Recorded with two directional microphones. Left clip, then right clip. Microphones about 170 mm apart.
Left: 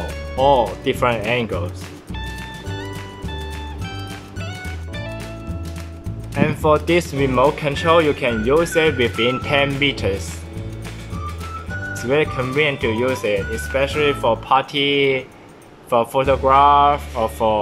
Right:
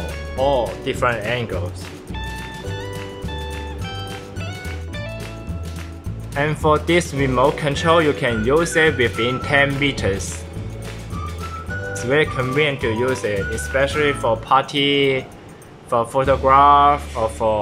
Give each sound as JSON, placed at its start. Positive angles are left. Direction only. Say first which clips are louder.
{"t": 0.4, "sound": "speech", "louder": "left 4 dB", "side_deg": 20}
{"t": 2.7, "sound": "music", "louder": "right 1 dB", "side_deg": 0}
{"t": 6.3, "sound": "speech", "louder": "left 1 dB", "side_deg": 5}
{"t": 11.7, "sound": "speech", "louder": "even", "side_deg": 0}